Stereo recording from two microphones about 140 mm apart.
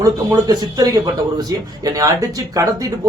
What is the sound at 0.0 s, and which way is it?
A man's voice, 25° right (ahead or behind).